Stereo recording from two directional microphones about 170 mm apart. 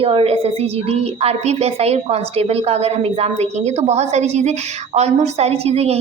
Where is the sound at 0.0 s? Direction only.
35° right (ahead or behind).